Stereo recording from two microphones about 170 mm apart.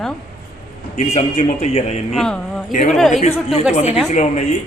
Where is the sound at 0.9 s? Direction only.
40° left (ahead or behind).